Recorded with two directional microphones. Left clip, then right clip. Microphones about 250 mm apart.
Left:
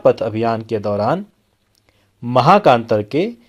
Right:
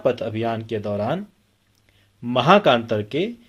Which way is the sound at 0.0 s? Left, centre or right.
Left.